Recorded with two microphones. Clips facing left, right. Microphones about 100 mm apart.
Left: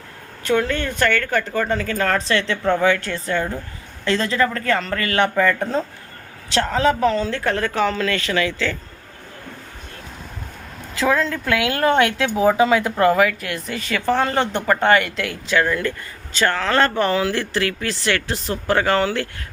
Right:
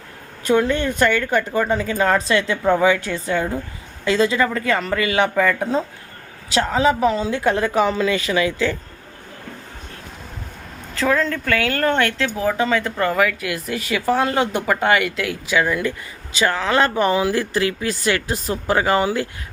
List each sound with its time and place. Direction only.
0.4 s speech: 15° right (ahead or behind)
10.9 s speech: 5° left (ahead or behind); by 19.3 s 15° right (ahead or behind)